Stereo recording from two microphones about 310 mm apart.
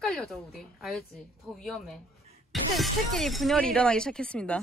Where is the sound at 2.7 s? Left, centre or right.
Centre.